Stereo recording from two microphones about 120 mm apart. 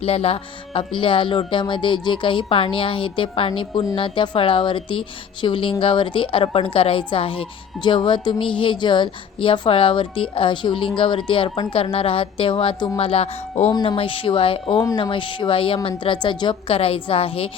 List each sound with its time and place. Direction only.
0.0 s a woman's voice: 55° left (ahead or behind)